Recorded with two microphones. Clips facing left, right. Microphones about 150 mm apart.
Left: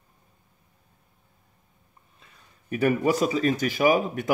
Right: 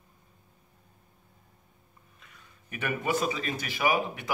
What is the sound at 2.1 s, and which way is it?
Speech, 35° left (ahead or behind).